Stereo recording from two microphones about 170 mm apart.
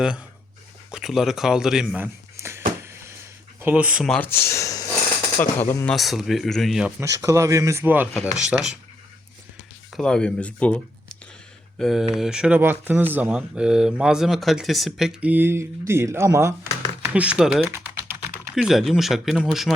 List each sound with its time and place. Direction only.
0.9 s speech: 5° right (ahead or behind)
2.3 s a sound: 15° right (ahead or behind)
3.6 s speech: 10° right (ahead or behind)
7.0 s speech: 20° right (ahead or behind)
9.9 s speech: 5° left (ahead or behind)